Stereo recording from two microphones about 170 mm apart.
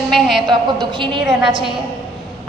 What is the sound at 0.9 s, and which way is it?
Speech, 30° right (ahead or behind).